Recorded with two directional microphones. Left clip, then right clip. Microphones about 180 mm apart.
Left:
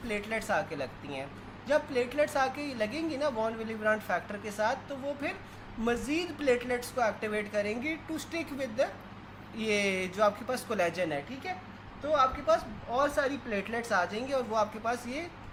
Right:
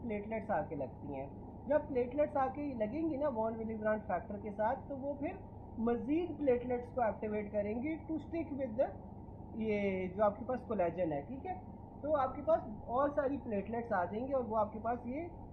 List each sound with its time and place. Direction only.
0.1 s a woman's voice: 25° left (ahead or behind)
5.8 s a woman's voice: 25° left (ahead or behind)
14.5 s speech: 40° left (ahead or behind)